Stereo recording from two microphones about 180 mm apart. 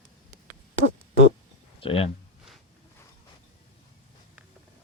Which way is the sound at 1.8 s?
30° left (ahead or behind).